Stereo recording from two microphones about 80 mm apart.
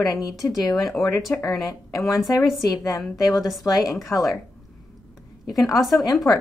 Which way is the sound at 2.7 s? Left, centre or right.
Left.